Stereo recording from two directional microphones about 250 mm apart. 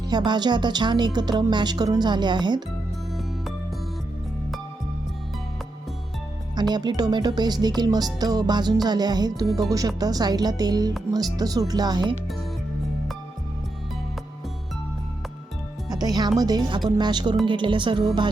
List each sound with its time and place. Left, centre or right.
0.1 s speech: centre
6.6 s speech: centre
15.9 s music: centre
16.4 s speech: centre